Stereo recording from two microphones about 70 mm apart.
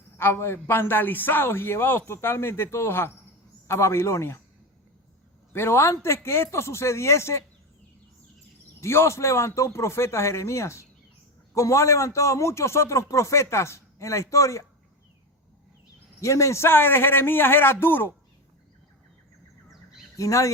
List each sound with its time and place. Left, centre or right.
0.2 s a man's voice: left
5.5 s a man's voice: left
8.8 s a man's voice: left
16.2 s a man's voice: left
20.1 s speech: left